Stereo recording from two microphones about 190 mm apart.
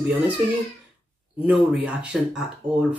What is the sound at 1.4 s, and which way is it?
Speech, 5° right (ahead or behind).